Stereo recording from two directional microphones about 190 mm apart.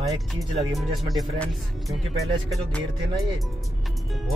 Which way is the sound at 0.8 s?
Centre (ahead or behind).